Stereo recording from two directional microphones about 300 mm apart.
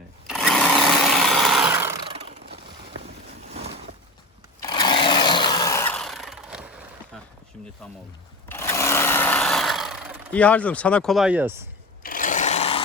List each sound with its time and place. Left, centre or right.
0.3 s sewing machine: centre
3.5 s a sound: right
4.6 s chainsaw: centre
8.4 s sewing machine: centre
12.0 s sewing machine: left